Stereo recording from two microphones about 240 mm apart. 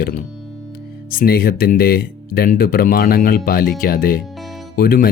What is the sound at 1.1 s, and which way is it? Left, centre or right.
Speech, left.